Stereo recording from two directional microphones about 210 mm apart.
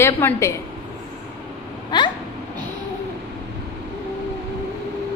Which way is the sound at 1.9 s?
20° left (ahead or behind).